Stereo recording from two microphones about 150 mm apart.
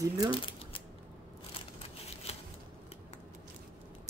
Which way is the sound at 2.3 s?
45° left (ahead or behind).